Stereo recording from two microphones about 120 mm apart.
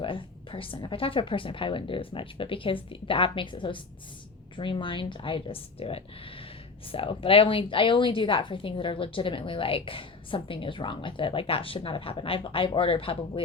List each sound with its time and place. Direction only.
0.0 s a woman's voice: 45° left (ahead or behind)